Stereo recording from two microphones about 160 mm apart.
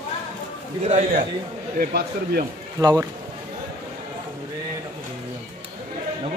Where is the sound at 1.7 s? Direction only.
75° right (ahead or behind).